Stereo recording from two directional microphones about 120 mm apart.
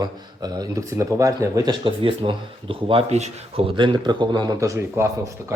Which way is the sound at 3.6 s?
40° right (ahead or behind).